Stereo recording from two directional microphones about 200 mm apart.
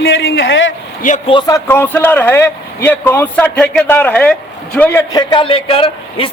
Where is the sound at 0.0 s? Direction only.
65° left (ahead or behind).